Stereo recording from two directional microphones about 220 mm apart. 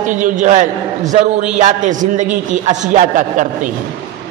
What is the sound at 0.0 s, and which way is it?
A man's voice, 35° right (ahead or behind).